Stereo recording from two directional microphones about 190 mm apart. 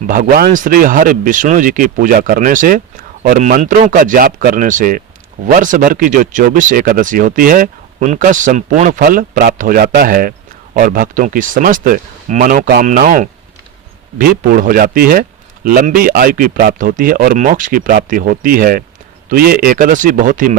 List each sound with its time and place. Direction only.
0.1 s speech: 50° right (ahead or behind)